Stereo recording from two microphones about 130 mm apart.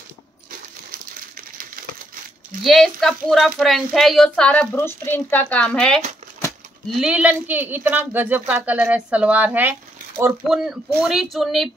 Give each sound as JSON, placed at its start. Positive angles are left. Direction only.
{"t": 1.3, "sound": "a sound", "side_deg": -90}
{"t": 2.6, "sound": "speech", "side_deg": 0}
{"t": 7.0, "sound": "speech", "side_deg": -10}
{"t": 10.5, "sound": "speech", "side_deg": -5}